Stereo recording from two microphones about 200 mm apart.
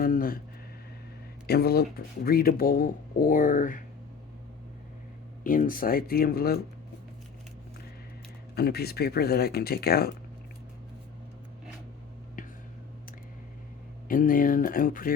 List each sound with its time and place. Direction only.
0.0 s a sound: 45° left (ahead or behind)
1.5 s speech: 50° left (ahead or behind)
5.4 s speech: 40° left (ahead or behind)
8.5 s speech: 50° left (ahead or behind)
14.1 s speech: 45° left (ahead or behind)